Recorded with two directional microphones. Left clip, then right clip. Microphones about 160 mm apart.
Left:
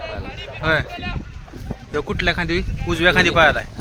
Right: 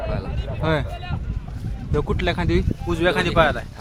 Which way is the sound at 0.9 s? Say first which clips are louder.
Left 5 dB; 25° right (ahead or behind).